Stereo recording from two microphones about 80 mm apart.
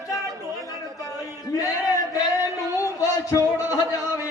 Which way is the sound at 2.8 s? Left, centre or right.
Left.